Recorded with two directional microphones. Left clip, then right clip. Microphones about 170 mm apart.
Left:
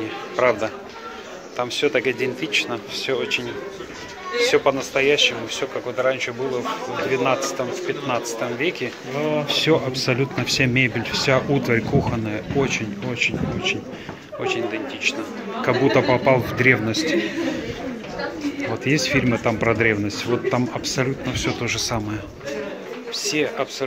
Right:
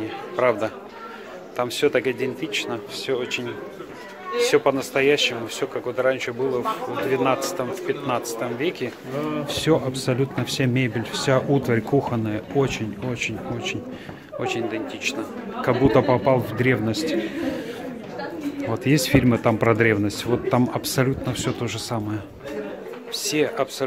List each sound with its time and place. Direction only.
0.4 s speech: 15° right (ahead or behind)
1.6 s speech: 30° right (ahead or behind)
2.1 s speech: 10° right (ahead or behind); by 6.6 s 25° right (ahead or behind)
8.4 s speech: 20° right (ahead or behind)
16.3 s speech: 15° right (ahead or behind)
18.9 s speech: 35° right (ahead or behind); by 22.2 s 15° right (ahead or behind)
23.1 s speech: 35° right (ahead or behind)